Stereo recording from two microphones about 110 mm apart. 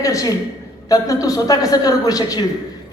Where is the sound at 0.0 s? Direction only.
30° left (ahead or behind).